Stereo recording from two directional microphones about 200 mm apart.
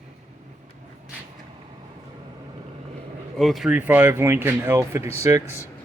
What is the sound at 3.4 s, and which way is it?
Speech, centre (ahead or behind).